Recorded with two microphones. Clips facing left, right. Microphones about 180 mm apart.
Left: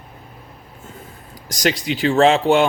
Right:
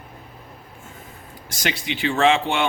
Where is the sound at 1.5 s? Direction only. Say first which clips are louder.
Left 7 dB; 40° left (ahead or behind).